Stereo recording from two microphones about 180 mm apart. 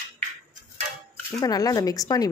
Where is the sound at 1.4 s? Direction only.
20° left (ahead or behind).